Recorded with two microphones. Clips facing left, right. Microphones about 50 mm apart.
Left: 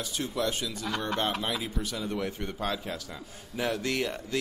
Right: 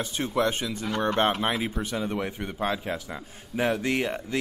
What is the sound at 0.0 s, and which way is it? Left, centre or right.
Speech, right.